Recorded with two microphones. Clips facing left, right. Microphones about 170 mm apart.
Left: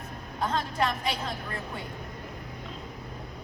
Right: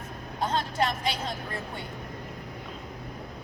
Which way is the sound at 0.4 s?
30° right (ahead or behind).